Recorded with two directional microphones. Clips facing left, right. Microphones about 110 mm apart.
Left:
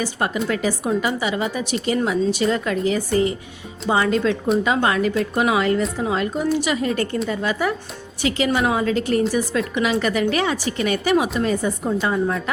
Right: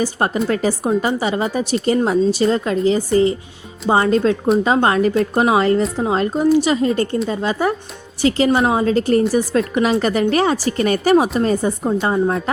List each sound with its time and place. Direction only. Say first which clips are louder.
0.0 s a woman's voice: right 4 dB; 40° right (ahead or behind)